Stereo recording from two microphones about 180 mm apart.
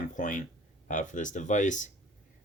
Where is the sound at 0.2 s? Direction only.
45° left (ahead or behind).